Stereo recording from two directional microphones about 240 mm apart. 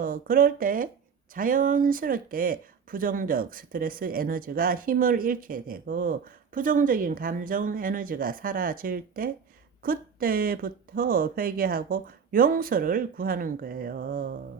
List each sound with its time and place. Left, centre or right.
0.0 s speech: right